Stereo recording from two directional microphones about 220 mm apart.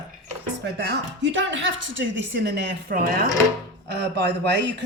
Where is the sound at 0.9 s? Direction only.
55° right (ahead or behind).